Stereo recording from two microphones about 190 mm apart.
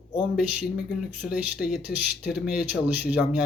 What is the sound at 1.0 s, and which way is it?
Speech, 5° right (ahead or behind).